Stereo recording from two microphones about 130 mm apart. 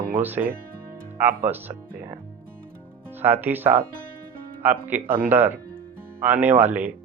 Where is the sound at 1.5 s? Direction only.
15° right (ahead or behind).